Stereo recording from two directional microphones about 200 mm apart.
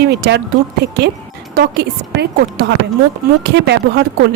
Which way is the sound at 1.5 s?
55° right (ahead or behind).